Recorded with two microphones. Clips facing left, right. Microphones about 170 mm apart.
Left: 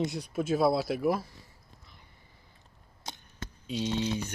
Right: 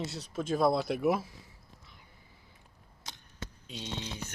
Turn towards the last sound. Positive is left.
turn(degrees=5)  # may be behind; listen again after turning